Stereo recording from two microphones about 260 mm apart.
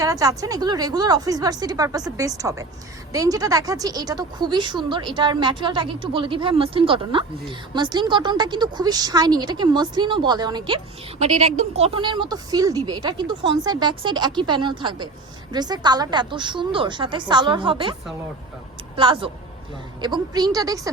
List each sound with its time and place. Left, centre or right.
0.0 s a woman's voice: centre
18.9 s a woman's voice: centre